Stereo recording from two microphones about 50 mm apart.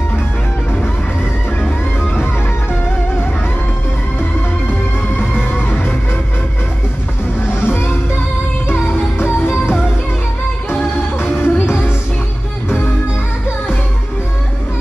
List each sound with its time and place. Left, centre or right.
5.1 s music: left
7.6 s music: left
11.0 s music: left